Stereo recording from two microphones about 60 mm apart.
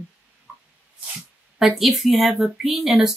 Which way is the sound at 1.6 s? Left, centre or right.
Centre.